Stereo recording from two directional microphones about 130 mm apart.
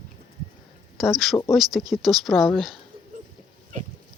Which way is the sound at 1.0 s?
Centre (ahead or behind).